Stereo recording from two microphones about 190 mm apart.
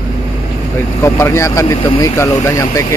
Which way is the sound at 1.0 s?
15° left (ahead or behind).